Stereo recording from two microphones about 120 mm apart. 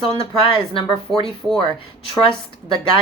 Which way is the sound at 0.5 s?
45° left (ahead or behind).